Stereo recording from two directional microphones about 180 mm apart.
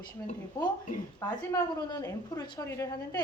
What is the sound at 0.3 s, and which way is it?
Speech, 45° left (ahead or behind).